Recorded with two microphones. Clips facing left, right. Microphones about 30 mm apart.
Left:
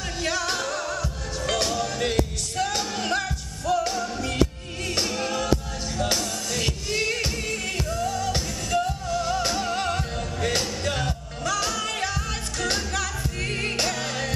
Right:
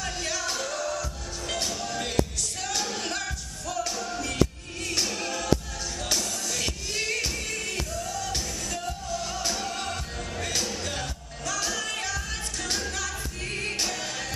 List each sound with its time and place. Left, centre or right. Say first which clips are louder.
0.2 s music: left 7 dB; left
2.0 s music: left 3 dB; left
7.4 s music: left 4 dB; left
13.5 s music: left 2 dB; left
13.7 s music: left 4 dB; left